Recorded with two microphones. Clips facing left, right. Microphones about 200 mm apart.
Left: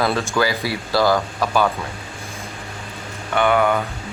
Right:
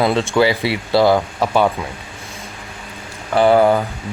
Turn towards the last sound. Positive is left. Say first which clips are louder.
# right 5 dB
turn(degrees=-35)  # may be behind; listen again after turning